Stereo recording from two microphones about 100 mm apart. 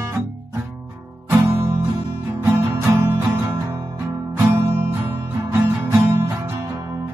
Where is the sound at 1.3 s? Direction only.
25° right (ahead or behind).